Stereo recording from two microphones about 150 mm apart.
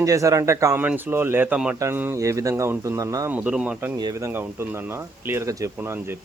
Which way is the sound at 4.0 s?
20° right (ahead or behind).